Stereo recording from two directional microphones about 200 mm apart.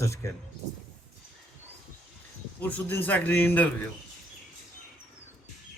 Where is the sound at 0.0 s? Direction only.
15° left (ahead or behind).